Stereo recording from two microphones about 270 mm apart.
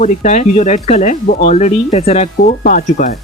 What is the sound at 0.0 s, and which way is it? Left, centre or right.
Speech, left.